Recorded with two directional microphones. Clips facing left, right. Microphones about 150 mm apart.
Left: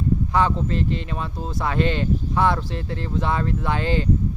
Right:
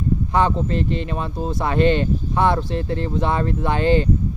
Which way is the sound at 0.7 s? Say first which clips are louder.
Right 2 dB; 55° right (ahead or behind).